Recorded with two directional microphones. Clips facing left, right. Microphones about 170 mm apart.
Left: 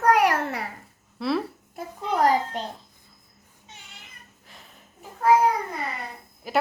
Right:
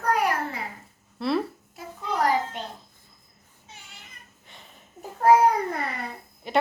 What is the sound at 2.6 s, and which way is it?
Speech, 35° left (ahead or behind).